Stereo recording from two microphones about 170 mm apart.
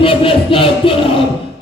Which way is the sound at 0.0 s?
30° left (ahead or behind).